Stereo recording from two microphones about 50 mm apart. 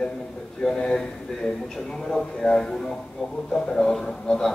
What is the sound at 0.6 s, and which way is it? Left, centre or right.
A man's voice, centre.